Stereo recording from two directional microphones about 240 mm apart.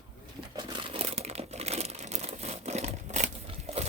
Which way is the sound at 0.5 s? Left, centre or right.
Right.